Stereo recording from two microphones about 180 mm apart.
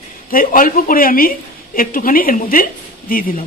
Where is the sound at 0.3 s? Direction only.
50° left (ahead or behind).